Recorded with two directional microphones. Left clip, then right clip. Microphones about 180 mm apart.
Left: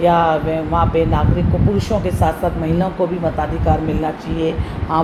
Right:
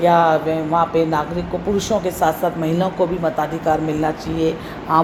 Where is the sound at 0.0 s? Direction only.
30° right (ahead or behind).